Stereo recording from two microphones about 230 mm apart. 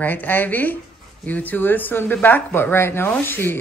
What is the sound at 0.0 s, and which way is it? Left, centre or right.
Speech, centre.